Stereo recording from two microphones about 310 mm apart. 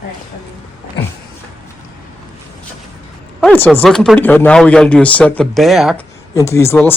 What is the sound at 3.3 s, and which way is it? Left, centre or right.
Speech, centre.